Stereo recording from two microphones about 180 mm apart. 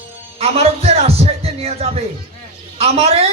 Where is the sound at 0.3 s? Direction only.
35° right (ahead or behind).